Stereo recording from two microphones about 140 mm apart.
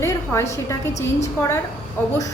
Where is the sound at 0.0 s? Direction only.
20° left (ahead or behind).